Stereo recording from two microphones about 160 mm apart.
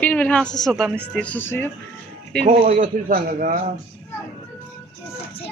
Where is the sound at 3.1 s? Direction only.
65° right (ahead or behind).